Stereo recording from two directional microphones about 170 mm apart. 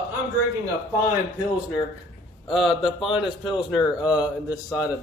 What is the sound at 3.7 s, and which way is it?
A man's voice, 25° left (ahead or behind).